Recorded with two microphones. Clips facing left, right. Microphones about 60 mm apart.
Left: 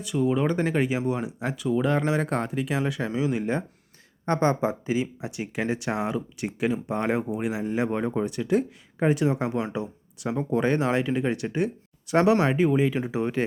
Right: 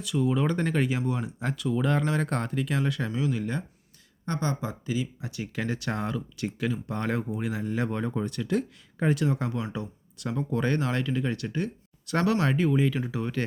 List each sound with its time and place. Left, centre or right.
0.1 s speech: centre
4.3 s speech: left